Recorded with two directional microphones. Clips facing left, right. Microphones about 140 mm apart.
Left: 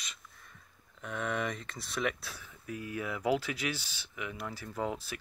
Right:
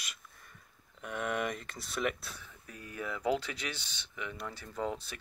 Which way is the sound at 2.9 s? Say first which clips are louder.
Left 1 dB; 10° left (ahead or behind).